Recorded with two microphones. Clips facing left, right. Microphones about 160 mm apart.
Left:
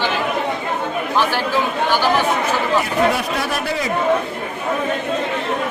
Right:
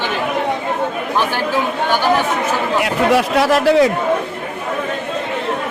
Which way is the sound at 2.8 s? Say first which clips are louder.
Right 3 dB; 90° right.